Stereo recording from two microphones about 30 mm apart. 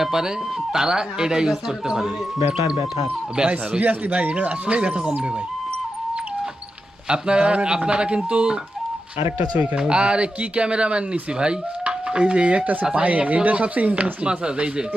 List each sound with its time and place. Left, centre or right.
0.0 s speech: centre
3.4 s speech: right
3.8 s speech: right
7.1 s speech: right
9.7 s speech: right
12.9 s speech: right
14.3 s speech: right